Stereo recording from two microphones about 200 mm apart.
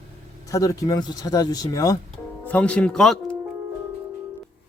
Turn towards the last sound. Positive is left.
turn(degrees=5)  # may be behind; listen again after turning